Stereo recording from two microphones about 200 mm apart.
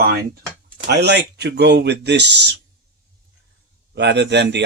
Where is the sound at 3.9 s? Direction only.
60° right (ahead or behind).